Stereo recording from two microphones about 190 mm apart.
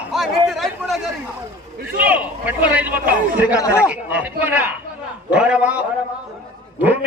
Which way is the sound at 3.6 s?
15° left (ahead or behind).